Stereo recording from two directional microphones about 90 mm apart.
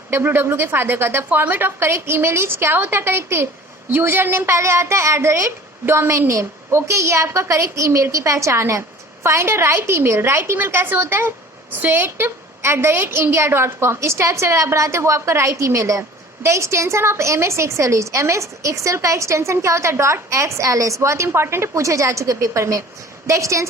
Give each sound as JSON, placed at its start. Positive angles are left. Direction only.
{"t": 0.1, "sound": "a woman's voice", "side_deg": -25}